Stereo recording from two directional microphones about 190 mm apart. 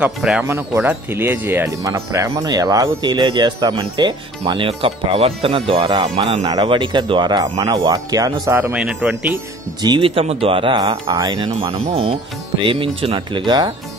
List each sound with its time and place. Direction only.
0.0 s speech: 5° right (ahead or behind)
9.8 s speech: 25° right (ahead or behind)